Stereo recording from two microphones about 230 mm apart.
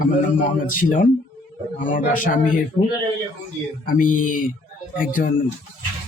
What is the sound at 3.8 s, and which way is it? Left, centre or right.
Speech, left.